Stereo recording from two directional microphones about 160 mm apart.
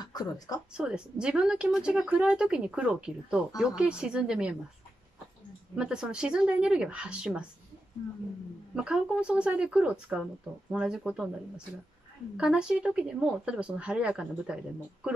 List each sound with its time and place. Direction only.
0.0 s speech: 25° left (ahead or behind)
0.7 s speech: 5° right (ahead or behind)
5.8 s speech: 5° right (ahead or behind)
8.7 s speech: 5° right (ahead or behind)